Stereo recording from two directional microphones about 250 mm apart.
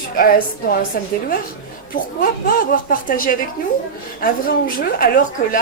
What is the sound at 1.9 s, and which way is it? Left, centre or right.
A woman's voice, left.